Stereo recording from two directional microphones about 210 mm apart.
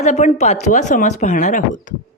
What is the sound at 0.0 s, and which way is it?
A woman's voice, 35° left (ahead or behind).